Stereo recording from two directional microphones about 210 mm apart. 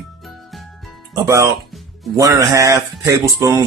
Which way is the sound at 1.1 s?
15° right (ahead or behind).